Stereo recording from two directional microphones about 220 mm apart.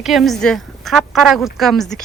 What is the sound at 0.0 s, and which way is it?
Speech, centre (ahead or behind).